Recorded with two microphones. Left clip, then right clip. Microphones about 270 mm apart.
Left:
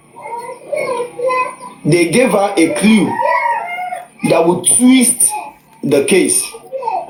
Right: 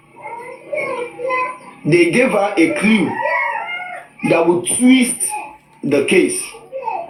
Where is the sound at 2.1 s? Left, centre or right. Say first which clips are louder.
Left 2 dB; left.